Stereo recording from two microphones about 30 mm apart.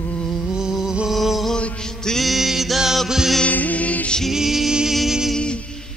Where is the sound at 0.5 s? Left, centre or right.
Centre.